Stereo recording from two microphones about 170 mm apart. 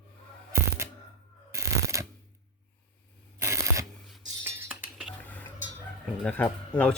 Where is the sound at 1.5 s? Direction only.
15° right (ahead or behind).